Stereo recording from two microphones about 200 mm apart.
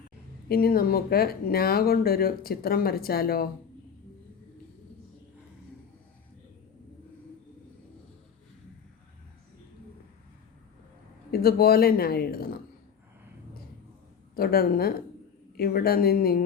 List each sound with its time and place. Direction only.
0.4 s speech: 50° left (ahead or behind)
11.3 s speech: 50° left (ahead or behind)
14.3 s speech: 50° left (ahead or behind)